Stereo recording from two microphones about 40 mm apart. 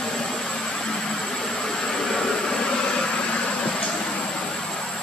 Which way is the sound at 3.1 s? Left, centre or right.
Left.